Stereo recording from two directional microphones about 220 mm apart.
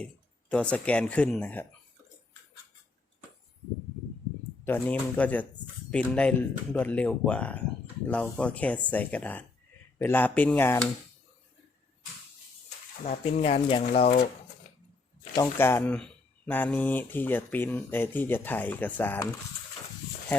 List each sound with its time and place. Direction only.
0.5 s speech: 5° left (ahead or behind)
4.6 s speech: 10° left (ahead or behind)
13.1 s speech: 25° left (ahead or behind)
15.4 s speech: 10° left (ahead or behind)